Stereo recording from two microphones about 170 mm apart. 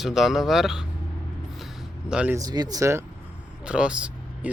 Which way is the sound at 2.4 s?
20° right (ahead or behind).